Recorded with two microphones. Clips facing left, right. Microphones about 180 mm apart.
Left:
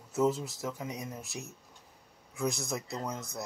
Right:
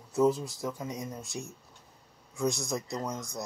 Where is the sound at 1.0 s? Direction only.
15° right (ahead or behind).